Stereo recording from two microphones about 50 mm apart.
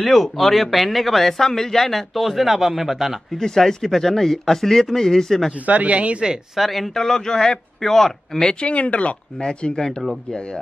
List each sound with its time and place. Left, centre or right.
0.0 s speech: centre
3.3 s a man's voice: centre
5.7 s speech: right
6.5 s a man's voice: centre